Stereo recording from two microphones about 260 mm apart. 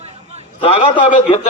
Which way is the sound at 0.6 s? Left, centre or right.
Centre.